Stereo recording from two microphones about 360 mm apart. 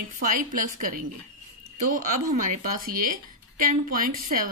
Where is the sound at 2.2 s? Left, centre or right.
Right.